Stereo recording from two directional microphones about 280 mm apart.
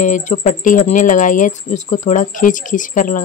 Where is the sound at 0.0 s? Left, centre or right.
Left.